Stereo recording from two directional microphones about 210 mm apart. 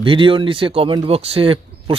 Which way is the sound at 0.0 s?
25° right (ahead or behind).